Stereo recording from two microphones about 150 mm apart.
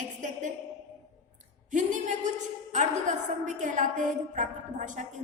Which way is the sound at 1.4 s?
55° right (ahead or behind).